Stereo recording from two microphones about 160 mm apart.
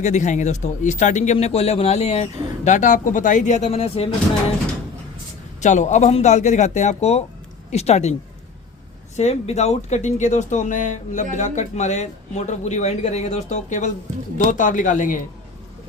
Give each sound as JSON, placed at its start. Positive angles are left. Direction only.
{"t": 0.0, "sound": "speech", "side_deg": 50}
{"t": 5.5, "sound": "speech", "side_deg": 50}
{"t": 9.1, "sound": "speech", "side_deg": 45}